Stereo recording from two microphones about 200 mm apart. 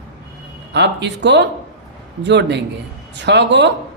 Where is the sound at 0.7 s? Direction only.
60° right (ahead or behind).